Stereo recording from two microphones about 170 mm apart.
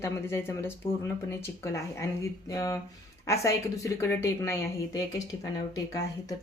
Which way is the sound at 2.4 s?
20° left (ahead or behind).